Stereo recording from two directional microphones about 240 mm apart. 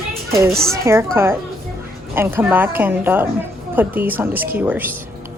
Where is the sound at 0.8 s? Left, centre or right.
Centre.